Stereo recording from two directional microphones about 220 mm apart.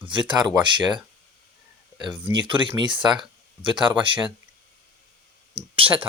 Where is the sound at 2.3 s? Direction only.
20° right (ahead or behind).